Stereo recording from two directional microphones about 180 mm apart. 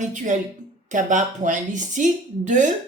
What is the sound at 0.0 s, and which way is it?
A woman's voice, 45° right (ahead or behind).